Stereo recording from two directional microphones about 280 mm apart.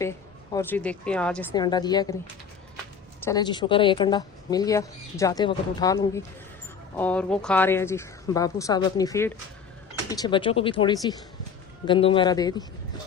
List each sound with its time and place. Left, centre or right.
0.5 s speech: centre
1.5 s speech: centre
3.2 s speech: centre